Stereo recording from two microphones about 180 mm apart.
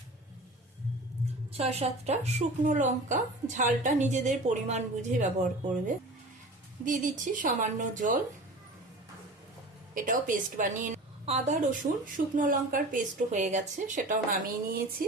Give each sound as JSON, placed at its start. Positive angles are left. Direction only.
{"t": 1.5, "sound": "a woman's voice", "side_deg": -35}
{"t": 6.8, "sound": "a woman's voice", "side_deg": -45}
{"t": 9.9, "sound": "a woman's voice", "side_deg": -50}